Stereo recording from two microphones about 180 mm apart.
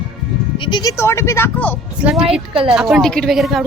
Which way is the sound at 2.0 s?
5° right (ahead or behind).